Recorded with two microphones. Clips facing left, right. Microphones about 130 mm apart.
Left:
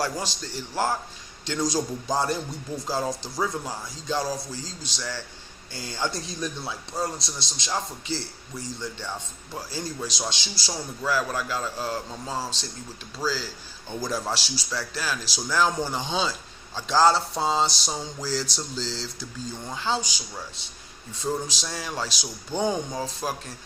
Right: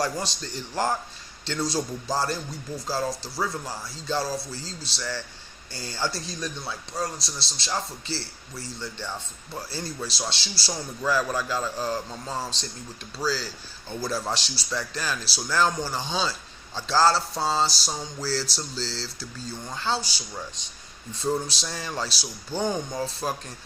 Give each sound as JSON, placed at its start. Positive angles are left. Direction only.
{"t": 0.0, "sound": "speech", "side_deg": 10}
{"t": 2.8, "sound": "a sound", "side_deg": 20}
{"t": 3.4, "sound": "speech", "side_deg": 15}
{"t": 6.2, "sound": "a sound", "side_deg": 20}
{"t": 7.7, "sound": "speech", "side_deg": 15}
{"t": 10.7, "sound": "speech", "side_deg": 5}
{"t": 15.7, "sound": "speech", "side_deg": 20}
{"t": 17.5, "sound": "a sound", "side_deg": 20}
{"t": 19.6, "sound": "speech", "side_deg": 10}
{"t": 22.6, "sound": "speech", "side_deg": 0}